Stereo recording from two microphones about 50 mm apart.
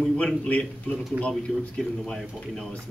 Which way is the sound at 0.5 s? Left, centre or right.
Left.